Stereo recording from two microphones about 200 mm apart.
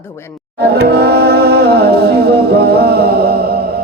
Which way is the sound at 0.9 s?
50° right (ahead or behind).